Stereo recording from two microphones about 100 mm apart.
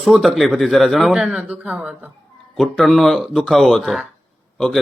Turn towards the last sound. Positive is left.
turn(degrees=0)  # may be behind; listen again after turning